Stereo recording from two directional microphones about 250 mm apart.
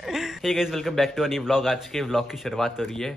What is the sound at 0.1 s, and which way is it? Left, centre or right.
Speech, centre.